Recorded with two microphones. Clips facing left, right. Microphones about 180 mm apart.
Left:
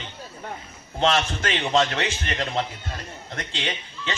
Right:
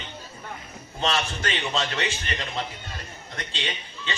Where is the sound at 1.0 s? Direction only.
55° left (ahead or behind).